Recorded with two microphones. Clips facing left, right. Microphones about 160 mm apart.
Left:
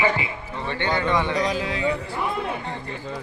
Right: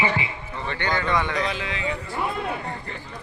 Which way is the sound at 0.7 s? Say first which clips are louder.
Left 2 dB; 15° left (ahead or behind).